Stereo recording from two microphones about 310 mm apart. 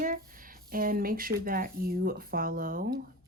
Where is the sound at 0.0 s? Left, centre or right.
Right.